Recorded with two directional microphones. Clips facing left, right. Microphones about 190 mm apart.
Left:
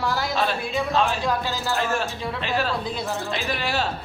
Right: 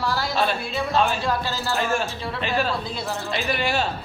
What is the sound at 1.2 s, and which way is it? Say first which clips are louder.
Music: even; 15° left (ahead or behind).